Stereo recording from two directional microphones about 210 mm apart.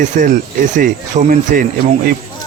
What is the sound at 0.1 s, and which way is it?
Speech, 40° right (ahead or behind).